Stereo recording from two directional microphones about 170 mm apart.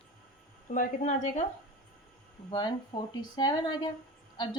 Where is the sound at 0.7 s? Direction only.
45° left (ahead or behind).